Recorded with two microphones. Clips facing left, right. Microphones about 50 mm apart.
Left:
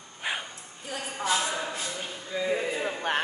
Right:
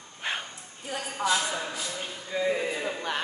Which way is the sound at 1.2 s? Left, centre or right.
Left.